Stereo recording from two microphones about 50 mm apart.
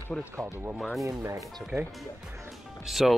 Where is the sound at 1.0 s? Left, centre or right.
Right.